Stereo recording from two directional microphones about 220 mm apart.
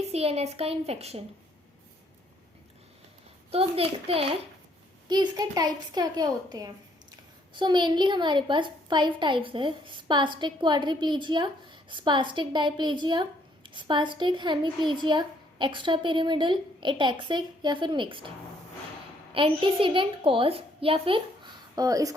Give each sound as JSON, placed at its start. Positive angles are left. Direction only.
{"t": 0.1, "sound": "a woman's voice", "side_deg": -30}
{"t": 3.5, "sound": "a woman's voice", "side_deg": -25}
{"t": 19.3, "sound": "a woman's voice", "side_deg": -25}